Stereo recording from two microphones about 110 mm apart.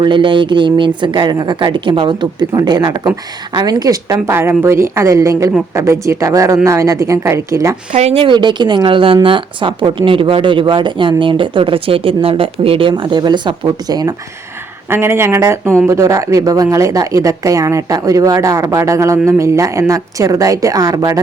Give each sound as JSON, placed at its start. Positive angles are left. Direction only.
{"t": 0.0, "sound": "a woman's voice", "side_deg": -45}
{"t": 4.3, "sound": "speech", "side_deg": -25}
{"t": 7.9, "sound": "speech", "side_deg": -70}
{"t": 12.9, "sound": "a woman's voice", "side_deg": -40}
{"t": 14.8, "sound": "a woman's voice", "side_deg": -20}